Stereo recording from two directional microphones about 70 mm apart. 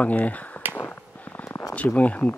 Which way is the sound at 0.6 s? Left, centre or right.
Right.